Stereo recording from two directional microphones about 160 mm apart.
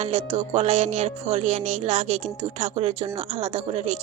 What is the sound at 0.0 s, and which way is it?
A woman's voice, 45° right (ahead or behind).